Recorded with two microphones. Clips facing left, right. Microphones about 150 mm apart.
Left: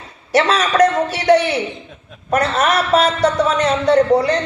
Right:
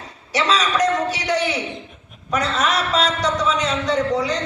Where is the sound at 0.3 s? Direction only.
60° left (ahead or behind).